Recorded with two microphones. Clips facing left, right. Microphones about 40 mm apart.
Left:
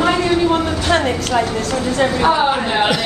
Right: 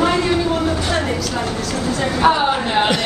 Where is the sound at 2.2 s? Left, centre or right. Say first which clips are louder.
Right 3 dB; centre.